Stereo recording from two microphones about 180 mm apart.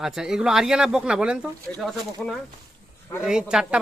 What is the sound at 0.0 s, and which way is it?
Speech, centre (ahead or behind).